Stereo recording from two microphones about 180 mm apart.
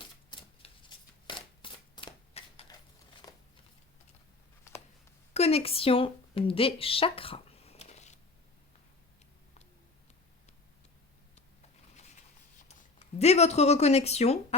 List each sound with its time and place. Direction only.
0.3 s shuffling cards: 25° left (ahead or behind)
3.2 s a sound: 20° left (ahead or behind)
5.3 s a woman's voice: 35° left (ahead or behind)
13.1 s a woman's voice: 35° left (ahead or behind)